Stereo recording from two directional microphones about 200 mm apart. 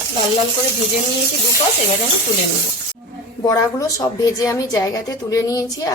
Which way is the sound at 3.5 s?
15° left (ahead or behind).